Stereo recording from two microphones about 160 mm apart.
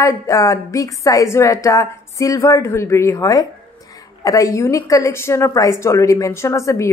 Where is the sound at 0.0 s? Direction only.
20° left (ahead or behind).